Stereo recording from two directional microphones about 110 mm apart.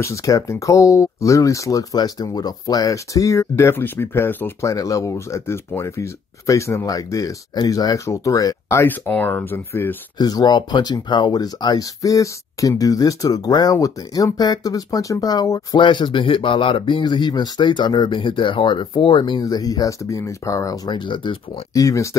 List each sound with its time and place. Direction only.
0.0 s speech: 30° left (ahead or behind)
4.6 s speech: 30° left (ahead or behind)
10.1 s speech: 40° left (ahead or behind)
15.8 s speech: 45° left (ahead or behind)
19.4 s speech: 35° left (ahead or behind)
21.7 s speech: 30° left (ahead or behind)